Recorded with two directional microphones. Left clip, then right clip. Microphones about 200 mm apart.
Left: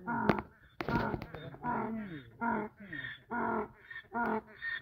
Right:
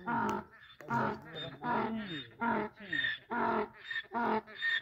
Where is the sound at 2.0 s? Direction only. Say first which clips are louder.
Right 1 dB; 25° right (ahead or behind).